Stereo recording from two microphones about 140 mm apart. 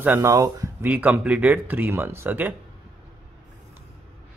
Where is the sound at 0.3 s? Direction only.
25° right (ahead or behind).